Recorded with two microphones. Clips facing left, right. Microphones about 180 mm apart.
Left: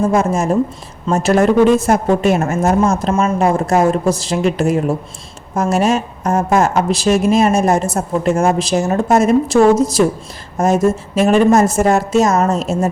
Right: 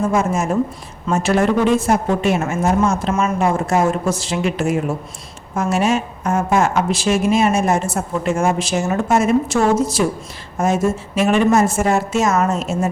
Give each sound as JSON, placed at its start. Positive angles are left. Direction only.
{"t": 0.0, "sound": "a woman's voice", "side_deg": 35}